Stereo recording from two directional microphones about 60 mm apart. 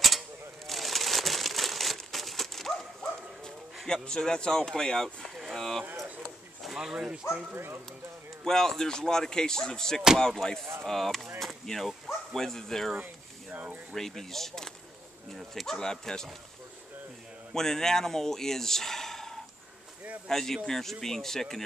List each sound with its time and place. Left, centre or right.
0.7 s crumpling: centre
3.7 s speech: centre
6.7 s speech: centre
7.5 s speech: right
8.5 s speech: centre
11.3 s chop: centre
12.3 s speech: centre
12.9 s a sound: right
13.9 s speech: centre
17.6 s speech: centre